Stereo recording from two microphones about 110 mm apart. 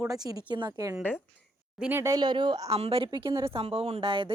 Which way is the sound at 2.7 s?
60° right (ahead or behind).